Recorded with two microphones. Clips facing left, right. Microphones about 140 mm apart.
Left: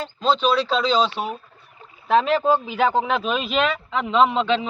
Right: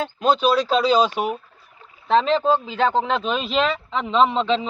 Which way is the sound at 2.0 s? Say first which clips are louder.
Even; 5° left (ahead or behind).